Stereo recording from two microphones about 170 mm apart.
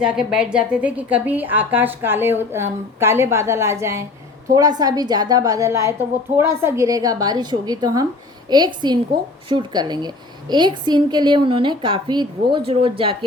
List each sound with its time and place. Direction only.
0.0 s a woman's voice: 5° right (ahead or behind); by 13.1 s 30° right (ahead or behind)